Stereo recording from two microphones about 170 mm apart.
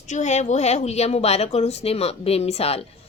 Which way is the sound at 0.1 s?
45° left (ahead or behind).